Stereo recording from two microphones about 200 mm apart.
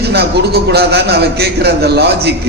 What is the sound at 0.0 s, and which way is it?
A man's voice, 55° right (ahead or behind).